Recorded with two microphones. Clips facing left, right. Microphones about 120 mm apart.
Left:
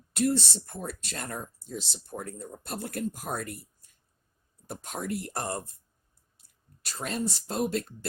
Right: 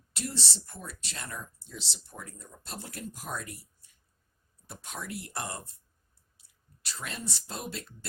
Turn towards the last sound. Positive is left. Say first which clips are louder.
# left 10 dB
turn(degrees=45)  # may be behind; listen again after turning